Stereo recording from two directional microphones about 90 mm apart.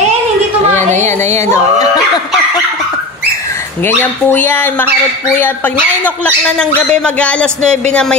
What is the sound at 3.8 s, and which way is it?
Speech, 20° left (ahead or behind).